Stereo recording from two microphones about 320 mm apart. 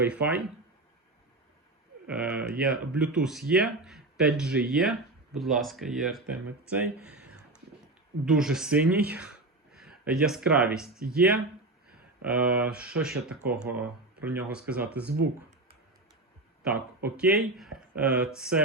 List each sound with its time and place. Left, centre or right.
0.0 s speech: centre
2.0 s speech: centre
15.0 s speech: right
17.0 s speech: centre